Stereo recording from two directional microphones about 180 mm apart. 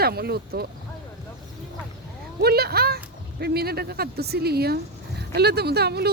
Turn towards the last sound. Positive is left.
turn(degrees=-65)  # may be behind; listen again after turning